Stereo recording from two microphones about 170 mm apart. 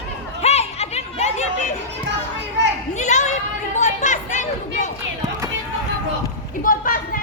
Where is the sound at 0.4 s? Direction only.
40° left (ahead or behind).